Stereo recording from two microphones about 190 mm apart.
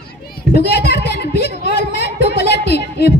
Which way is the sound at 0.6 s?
60° left (ahead or behind).